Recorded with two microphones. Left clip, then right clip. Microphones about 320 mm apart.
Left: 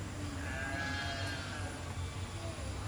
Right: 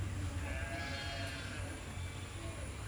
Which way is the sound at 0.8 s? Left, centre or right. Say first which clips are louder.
Left 4 dB; left.